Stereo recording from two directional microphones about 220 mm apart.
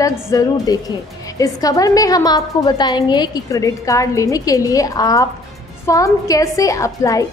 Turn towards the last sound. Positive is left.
turn(degrees=15)  # may be behind; listen again after turning